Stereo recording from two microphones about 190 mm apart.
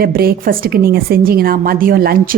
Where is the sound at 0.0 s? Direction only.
55° right (ahead or behind).